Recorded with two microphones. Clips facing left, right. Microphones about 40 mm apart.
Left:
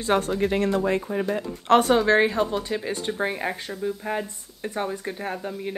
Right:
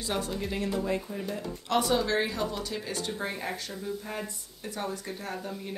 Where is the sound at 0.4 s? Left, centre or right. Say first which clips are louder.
Left 9 dB; left.